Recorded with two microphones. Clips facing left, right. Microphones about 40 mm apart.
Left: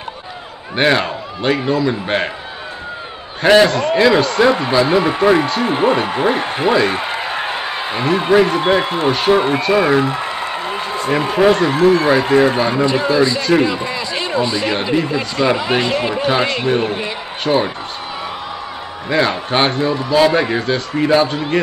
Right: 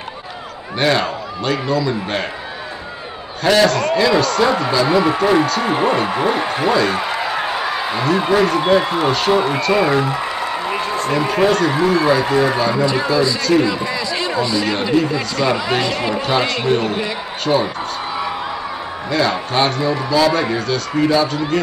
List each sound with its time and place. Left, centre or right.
0.7 s speech: left
3.4 s a man's voice: left
9.1 s speech: centre
10.0 s applause: left
11.1 s speech: left
11.7 s speech: left
13.4 s speech: left
17.0 s a man's voice: left
19.0 s speech: left